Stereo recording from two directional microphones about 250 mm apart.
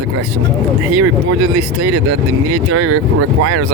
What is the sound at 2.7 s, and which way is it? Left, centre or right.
Speech, right.